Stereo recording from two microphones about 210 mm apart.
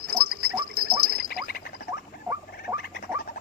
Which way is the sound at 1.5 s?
45° left (ahead or behind).